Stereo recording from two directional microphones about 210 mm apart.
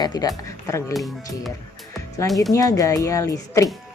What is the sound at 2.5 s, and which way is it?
Speech, 15° left (ahead or behind).